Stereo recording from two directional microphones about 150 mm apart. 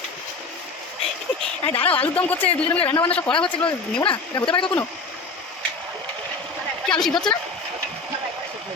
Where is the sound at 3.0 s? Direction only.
35° left (ahead or behind).